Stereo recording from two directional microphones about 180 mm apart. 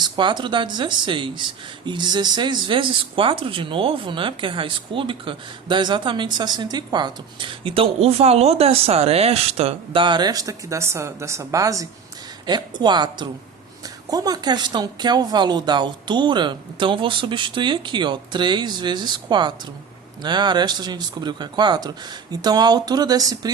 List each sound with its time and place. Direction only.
0.0 s speech: 25° right (ahead or behind)